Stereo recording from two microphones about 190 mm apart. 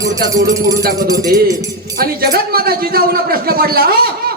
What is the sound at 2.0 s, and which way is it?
A man's voice, 55° right (ahead or behind).